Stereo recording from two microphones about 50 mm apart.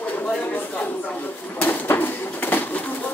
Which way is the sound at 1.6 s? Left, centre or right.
Left.